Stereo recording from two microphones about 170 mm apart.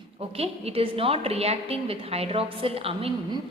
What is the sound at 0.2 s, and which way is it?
A woman's voice, 35° right (ahead or behind).